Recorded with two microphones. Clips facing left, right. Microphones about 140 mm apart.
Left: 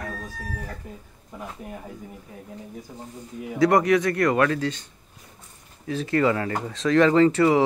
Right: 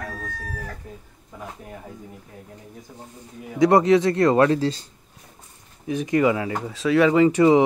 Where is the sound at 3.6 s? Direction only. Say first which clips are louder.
Right 3 dB; 25° right (ahead or behind).